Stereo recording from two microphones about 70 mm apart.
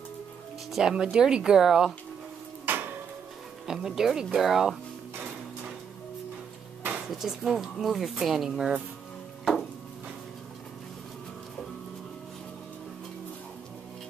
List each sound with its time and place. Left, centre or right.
0.7 s speech: centre
2.7 s a sound: right
3.6 s speech: centre
6.9 s speech: centre